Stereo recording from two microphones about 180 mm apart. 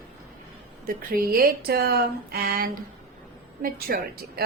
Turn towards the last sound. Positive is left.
turn(degrees=-55)  # may be behind; listen again after turning